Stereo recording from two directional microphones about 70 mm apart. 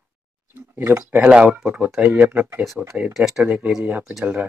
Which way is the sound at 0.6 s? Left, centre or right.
Right.